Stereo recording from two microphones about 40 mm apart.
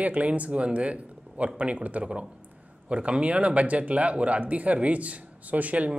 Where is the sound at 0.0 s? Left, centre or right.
Right.